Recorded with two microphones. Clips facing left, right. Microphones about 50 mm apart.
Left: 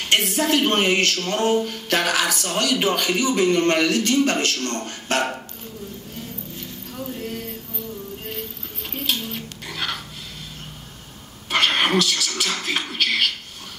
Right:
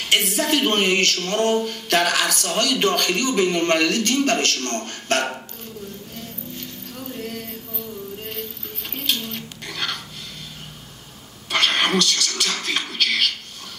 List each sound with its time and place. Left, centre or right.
0.0 s speech: centre
7.2 s a sound: centre
8.9 s bird: centre
11.5 s speech: centre